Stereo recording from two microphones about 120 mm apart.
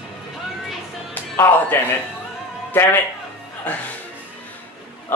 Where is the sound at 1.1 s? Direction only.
20° left (ahead or behind).